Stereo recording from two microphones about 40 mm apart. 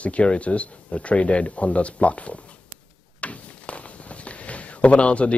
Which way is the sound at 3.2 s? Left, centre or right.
Left.